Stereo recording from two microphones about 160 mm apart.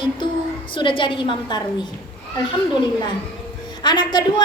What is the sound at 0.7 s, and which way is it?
Speech, 30° left (ahead or behind).